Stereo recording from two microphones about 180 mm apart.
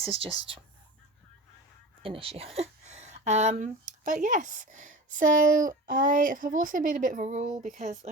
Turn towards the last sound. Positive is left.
turn(degrees=-40)  # may be behind; listen again after turning